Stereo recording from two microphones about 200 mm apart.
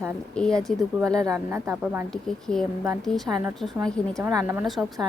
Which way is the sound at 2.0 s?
5° left (ahead or behind).